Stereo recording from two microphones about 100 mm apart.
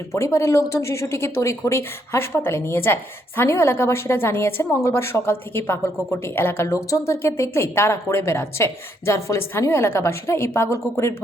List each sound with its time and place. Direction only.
0.1 s speech: 25° left (ahead or behind)